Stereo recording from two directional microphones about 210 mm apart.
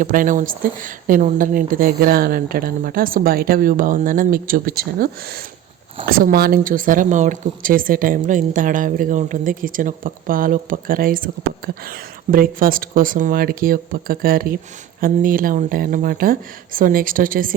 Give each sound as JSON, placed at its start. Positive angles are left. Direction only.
{"t": 0.0, "sound": "a woman's voice", "side_deg": -40}